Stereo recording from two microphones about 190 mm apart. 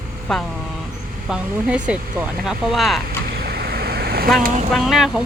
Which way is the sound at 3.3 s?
55° right (ahead or behind).